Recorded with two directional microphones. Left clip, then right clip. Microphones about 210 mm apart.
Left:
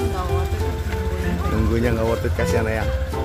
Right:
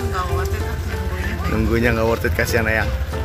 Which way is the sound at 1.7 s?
10° right (ahead or behind).